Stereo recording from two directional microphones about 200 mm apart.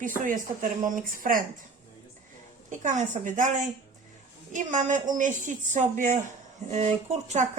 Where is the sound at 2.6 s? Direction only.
40° right (ahead or behind).